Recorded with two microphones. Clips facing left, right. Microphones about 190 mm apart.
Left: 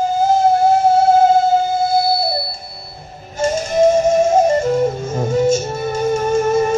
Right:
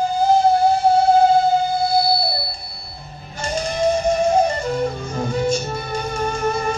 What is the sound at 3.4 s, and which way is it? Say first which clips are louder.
Music: left 7 dB; 45° left (ahead or behind).